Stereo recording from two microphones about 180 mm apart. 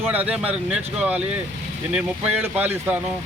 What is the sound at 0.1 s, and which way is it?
Speech, 10° right (ahead or behind).